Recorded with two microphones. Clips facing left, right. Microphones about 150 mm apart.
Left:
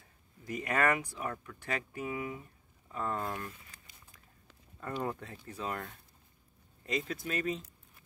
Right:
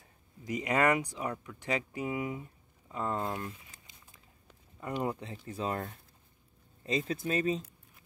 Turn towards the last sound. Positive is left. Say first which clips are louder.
# right 4 dB
turn(degrees=-30)  # may be behind; listen again after turning